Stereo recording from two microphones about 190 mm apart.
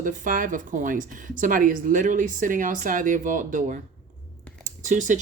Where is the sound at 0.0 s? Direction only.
45° right (ahead or behind).